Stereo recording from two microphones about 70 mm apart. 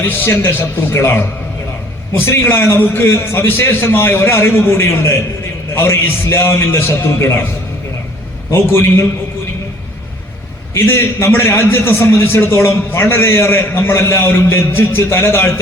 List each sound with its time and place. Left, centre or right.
0.0 s a man's voice: left
8.4 s a man's voice: left
10.8 s a man's voice: left